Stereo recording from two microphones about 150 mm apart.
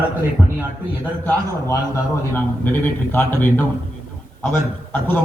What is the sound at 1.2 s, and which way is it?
Speech, 15° left (ahead or behind).